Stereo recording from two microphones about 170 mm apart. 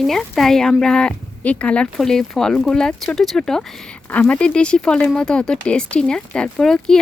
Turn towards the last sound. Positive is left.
turn(degrees=5)  # may be behind; listen again after turning